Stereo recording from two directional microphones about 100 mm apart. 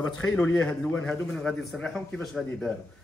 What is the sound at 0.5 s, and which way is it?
Speech, 25° left (ahead or behind).